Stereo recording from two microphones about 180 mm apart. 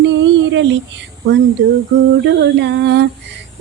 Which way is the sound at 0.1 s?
90° right.